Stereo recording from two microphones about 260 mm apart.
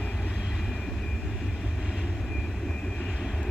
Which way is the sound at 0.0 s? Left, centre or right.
Centre.